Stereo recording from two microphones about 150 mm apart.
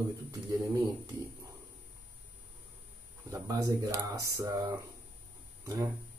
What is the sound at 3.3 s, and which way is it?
Speech, 25° right (ahead or behind).